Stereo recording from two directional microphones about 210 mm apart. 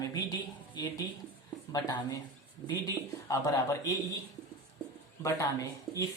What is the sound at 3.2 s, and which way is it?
Speech, 15° left (ahead or behind).